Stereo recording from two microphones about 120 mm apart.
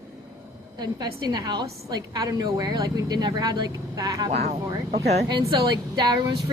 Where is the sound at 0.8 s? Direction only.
35° right (ahead or behind).